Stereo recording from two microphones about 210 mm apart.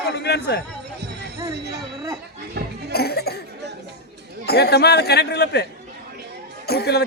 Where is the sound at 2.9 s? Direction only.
50° left (ahead or behind).